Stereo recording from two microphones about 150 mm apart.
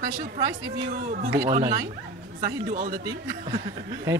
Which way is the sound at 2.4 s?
65° right (ahead or behind).